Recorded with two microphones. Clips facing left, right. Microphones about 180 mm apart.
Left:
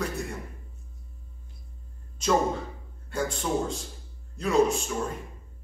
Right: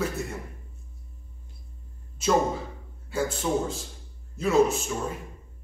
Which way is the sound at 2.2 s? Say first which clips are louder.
Right 1 dB; 5° right (ahead or behind).